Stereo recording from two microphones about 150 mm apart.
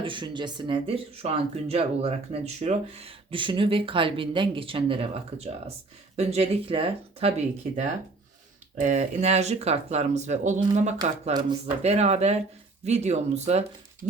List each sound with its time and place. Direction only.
0.0 s speech: 35° right (ahead or behind)